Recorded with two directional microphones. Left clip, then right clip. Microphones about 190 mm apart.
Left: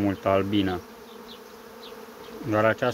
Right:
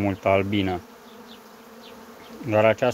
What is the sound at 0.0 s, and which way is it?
Speech, 20° right (ahead or behind).